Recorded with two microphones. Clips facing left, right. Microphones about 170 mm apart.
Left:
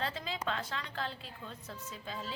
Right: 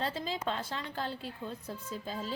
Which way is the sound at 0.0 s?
35° right (ahead or behind).